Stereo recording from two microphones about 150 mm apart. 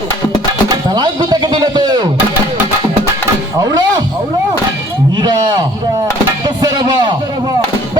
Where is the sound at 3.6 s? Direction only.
25° right (ahead or behind).